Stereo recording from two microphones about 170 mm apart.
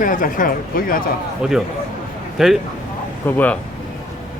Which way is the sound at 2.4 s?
5° right (ahead or behind).